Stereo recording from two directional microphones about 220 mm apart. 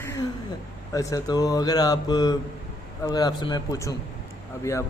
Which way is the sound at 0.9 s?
15° left (ahead or behind).